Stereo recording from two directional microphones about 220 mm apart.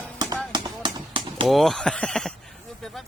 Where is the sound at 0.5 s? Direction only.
20° right (ahead or behind).